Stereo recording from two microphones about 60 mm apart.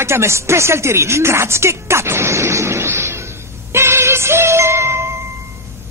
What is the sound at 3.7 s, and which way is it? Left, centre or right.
Music, right.